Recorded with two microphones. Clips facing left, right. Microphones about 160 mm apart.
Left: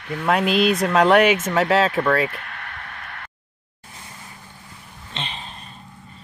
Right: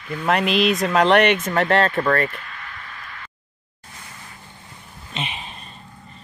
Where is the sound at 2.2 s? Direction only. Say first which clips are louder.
Left 1 dB; 65° left (ahead or behind).